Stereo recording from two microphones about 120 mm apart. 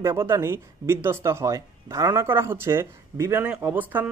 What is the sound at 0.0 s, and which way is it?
Speech, 20° right (ahead or behind).